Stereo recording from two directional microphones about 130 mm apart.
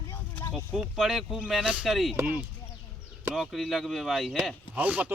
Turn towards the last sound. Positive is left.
turn(degrees=-10)  # may be behind; listen again after turning